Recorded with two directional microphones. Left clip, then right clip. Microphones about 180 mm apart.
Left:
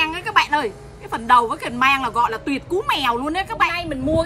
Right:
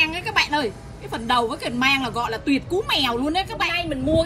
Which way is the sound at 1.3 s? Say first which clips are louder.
Left 6 dB; 35° left (ahead or behind).